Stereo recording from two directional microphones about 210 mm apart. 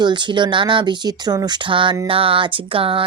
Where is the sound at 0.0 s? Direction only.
20° right (ahead or behind).